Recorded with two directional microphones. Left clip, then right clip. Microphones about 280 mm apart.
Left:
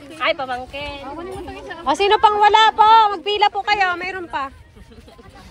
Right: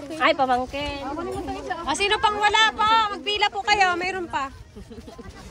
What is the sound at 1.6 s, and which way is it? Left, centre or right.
A woman's voice, centre.